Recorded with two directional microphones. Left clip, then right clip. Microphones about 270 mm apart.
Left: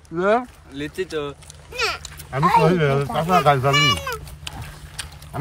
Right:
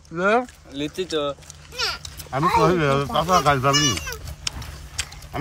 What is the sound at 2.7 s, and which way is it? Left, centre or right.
Speech, centre.